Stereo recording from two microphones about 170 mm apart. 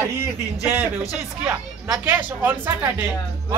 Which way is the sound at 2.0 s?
10° right (ahead or behind).